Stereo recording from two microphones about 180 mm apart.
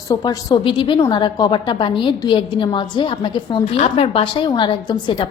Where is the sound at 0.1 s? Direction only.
20° left (ahead or behind).